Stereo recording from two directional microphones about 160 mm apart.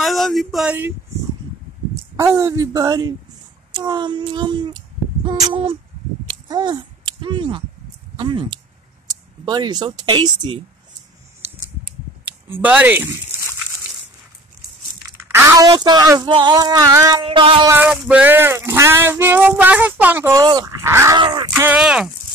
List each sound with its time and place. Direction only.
0.0 s a sound: centre (ahead or behind)
0.7 s speech: 15° right (ahead or behind)
5.5 s music: 35° right (ahead or behind)
6.5 s speech: 25° right (ahead or behind)
12.6 s speech: 10° right (ahead or behind)
15.3 s speech: 20° right (ahead or behind)
17.2 s music: 35° right (ahead or behind)
17.6 s male singing: 10° right (ahead or behind)
21.2 s music: 30° right (ahead or behind)
21.7 s speech: 5° right (ahead or behind)